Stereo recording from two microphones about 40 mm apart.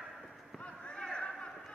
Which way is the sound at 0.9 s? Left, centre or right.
Centre.